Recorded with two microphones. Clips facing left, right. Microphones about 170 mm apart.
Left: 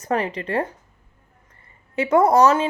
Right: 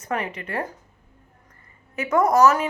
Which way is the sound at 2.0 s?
30° left (ahead or behind).